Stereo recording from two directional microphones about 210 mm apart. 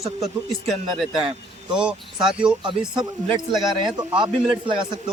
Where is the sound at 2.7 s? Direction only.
20° right (ahead or behind).